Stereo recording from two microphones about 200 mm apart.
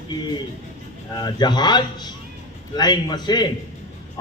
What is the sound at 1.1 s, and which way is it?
A man's voice, 20° left (ahead or behind).